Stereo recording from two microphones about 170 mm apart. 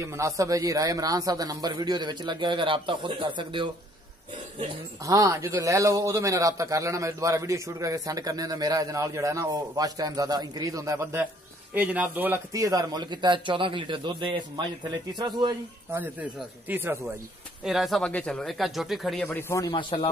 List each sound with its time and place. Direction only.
0.0 s a man's voice: 15° right (ahead or behind)
5.0 s a man's voice: 20° right (ahead or behind)
16.0 s speech: 10° right (ahead or behind)
17.6 s speech: centre (ahead or behind)
19.2 s a man's voice: 15° left (ahead or behind)